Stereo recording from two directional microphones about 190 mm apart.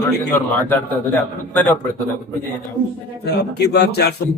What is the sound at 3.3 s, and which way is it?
Speech, 60° left (ahead or behind).